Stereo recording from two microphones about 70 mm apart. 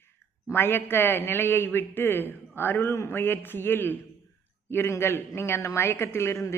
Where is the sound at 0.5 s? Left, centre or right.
Left.